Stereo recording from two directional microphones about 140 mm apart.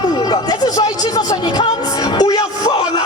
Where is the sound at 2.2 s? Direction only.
30° left (ahead or behind).